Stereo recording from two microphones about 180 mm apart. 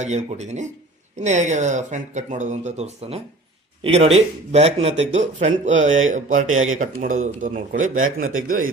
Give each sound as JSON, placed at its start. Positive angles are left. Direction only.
{"t": 0.0, "sound": "speech", "side_deg": -40}